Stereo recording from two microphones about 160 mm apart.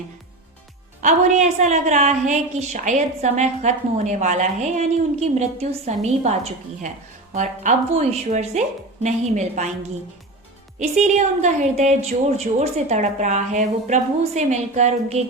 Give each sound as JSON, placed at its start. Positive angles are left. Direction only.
{"t": 1.0, "sound": "a woman's voice", "side_deg": -50}
{"t": 10.8, "sound": "a woman's voice", "side_deg": -45}